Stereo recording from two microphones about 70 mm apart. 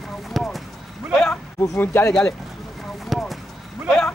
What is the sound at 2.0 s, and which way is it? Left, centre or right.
Speech, left.